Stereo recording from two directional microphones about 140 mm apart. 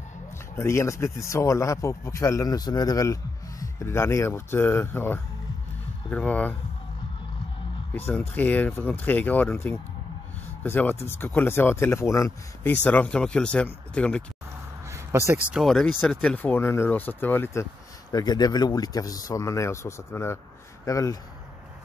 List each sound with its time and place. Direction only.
0.6 s speech: 20° left (ahead or behind)
8.1 s speech: 15° left (ahead or behind)
12.8 s speech: 10° left (ahead or behind)
14.9 s a sound: 20° right (ahead or behind)
15.5 s speech: centre (ahead or behind)
18.1 s speech: 30° left (ahead or behind)